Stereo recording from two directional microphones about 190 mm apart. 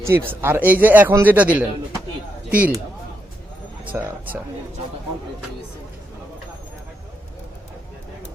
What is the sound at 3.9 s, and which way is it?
Speech, 10° right (ahead or behind).